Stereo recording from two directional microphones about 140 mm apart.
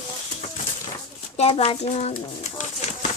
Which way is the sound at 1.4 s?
50° left (ahead or behind).